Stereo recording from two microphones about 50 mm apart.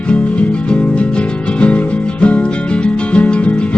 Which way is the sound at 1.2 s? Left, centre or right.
Left.